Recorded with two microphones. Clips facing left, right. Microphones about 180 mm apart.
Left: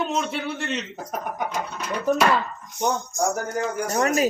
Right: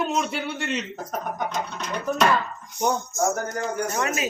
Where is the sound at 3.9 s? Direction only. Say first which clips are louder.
Left 5 dB; 40° left (ahead or behind).